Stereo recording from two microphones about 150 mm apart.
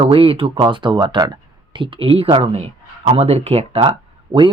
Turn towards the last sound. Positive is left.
turn(degrees=-35)  # may be behind; listen again after turning